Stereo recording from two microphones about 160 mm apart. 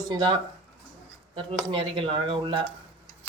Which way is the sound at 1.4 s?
35° right (ahead or behind).